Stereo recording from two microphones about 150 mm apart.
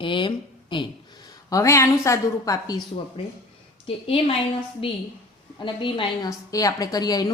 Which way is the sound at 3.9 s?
40° left (ahead or behind).